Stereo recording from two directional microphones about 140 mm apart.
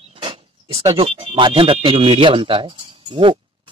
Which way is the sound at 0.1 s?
40° right (ahead or behind).